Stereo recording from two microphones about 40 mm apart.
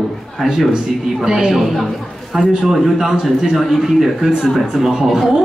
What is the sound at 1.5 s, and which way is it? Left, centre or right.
Speech, centre.